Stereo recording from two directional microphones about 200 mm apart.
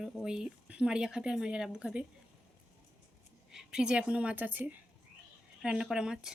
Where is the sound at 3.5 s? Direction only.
5° right (ahead or behind).